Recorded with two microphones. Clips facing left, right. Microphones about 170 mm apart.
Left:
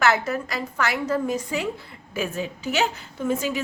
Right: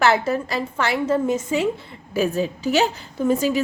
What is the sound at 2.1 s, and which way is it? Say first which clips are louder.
A woman's voice: right 7 dB; 35° right (ahead or behind).